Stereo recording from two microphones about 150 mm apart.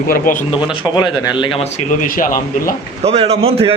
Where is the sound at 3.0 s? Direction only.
40° right (ahead or behind).